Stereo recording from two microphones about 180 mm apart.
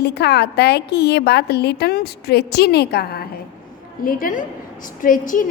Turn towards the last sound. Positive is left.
turn(degrees=50)  # may be behind; listen again after turning